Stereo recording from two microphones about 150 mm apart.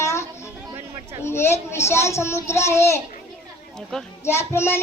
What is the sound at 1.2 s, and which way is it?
Speech, 15° left (ahead or behind).